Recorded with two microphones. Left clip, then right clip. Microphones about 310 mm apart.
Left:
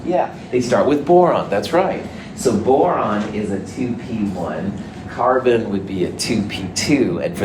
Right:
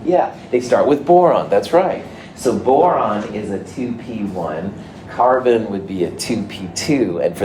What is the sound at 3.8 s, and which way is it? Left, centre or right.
Speech, right.